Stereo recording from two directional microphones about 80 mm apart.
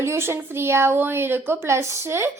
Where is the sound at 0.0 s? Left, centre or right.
Right.